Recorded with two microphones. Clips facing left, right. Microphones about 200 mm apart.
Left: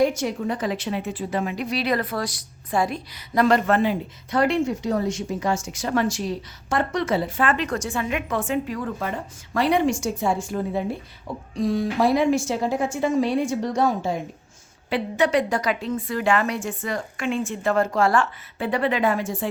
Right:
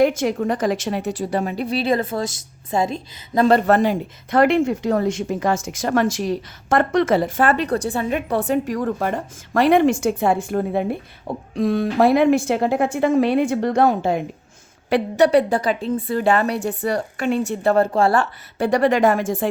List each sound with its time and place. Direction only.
0.0 s a woman's voice: 55° right (ahead or behind); by 1.6 s 35° right (ahead or behind)
1.7 s a woman's voice: 25° right (ahead or behind); by 5.5 s 55° right (ahead or behind)
6.7 s a woman's voice: 50° right (ahead or behind)
7.3 s a woman's voice: 40° right (ahead or behind)
8.4 s a woman's voice: 45° right (ahead or behind); by 14.2 s 60° right (ahead or behind)
15.2 s a woman's voice: 35° right (ahead or behind)
18.9 s a woman's voice: 45° right (ahead or behind)
19.4 s speech: 70° right (ahead or behind)